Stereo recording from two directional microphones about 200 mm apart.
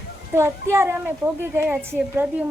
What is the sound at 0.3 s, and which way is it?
A woman's voice, 15° right (ahead or behind).